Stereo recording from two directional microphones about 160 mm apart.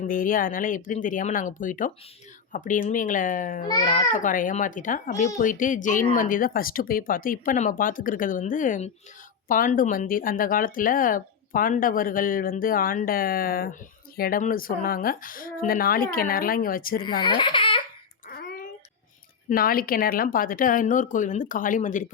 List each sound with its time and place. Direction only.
0.1 s speech: 60° left (ahead or behind)
3.7 s a child's voice: 25° left (ahead or behind)
3.9 s speech: 55° left (ahead or behind)
17.2 s speech: 30° left (ahead or behind)
18.3 s a sound: 80° left
19.5 s speech: 65° left (ahead or behind)